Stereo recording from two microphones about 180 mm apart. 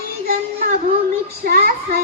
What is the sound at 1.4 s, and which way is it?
Child singing, 55° right (ahead or behind).